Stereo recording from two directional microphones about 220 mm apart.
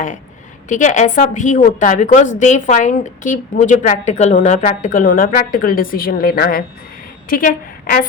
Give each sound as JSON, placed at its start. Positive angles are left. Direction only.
{"t": 0.7, "sound": "a woman's voice", "side_deg": 35}